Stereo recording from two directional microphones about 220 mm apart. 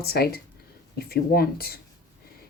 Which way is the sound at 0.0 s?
45° left (ahead or behind).